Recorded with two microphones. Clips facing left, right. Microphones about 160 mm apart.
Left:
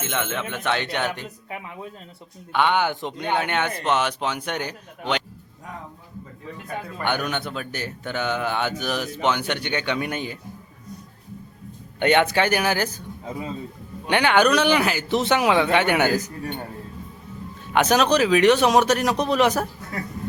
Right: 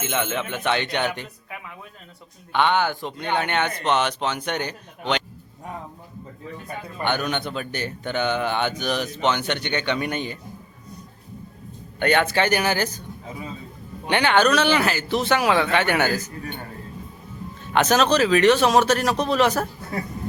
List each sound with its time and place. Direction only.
0.0 s speech: centre (ahead or behind)
2.5 s speech: 10° left (ahead or behind)
7.0 s speech: 10° left (ahead or behind)
11.9 s speech: 20° left (ahead or behind)
14.1 s speech: 10° left (ahead or behind)
17.7 s speech: 15° left (ahead or behind)